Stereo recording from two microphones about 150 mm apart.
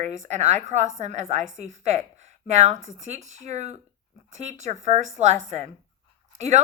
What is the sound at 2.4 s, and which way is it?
A woman's voice, 50° right (ahead or behind).